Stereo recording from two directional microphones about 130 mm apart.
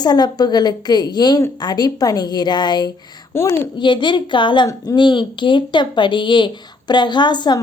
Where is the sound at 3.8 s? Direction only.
35° left (ahead or behind).